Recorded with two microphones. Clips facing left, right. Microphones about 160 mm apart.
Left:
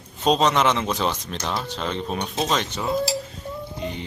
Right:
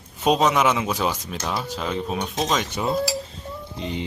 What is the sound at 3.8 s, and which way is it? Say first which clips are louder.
Music: right 3 dB; 20° right (ahead or behind).